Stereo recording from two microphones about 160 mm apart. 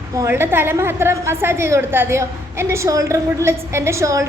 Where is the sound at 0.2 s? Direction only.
15° right (ahead or behind).